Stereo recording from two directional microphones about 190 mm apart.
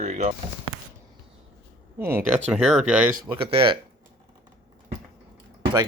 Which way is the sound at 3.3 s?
30° right (ahead or behind).